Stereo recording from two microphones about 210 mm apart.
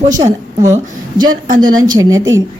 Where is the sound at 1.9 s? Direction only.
15° right (ahead or behind).